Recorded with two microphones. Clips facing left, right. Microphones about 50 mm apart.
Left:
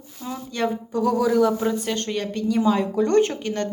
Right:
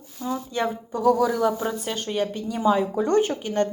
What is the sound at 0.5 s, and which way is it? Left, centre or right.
Speech, centre.